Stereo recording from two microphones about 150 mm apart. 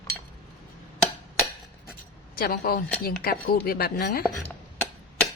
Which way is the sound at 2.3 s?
85° left.